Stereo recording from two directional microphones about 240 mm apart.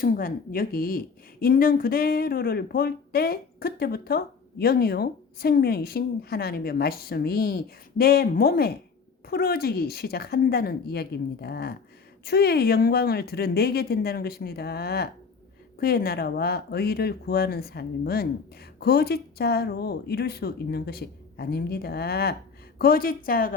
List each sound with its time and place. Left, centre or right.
0.0 s a woman's voice: left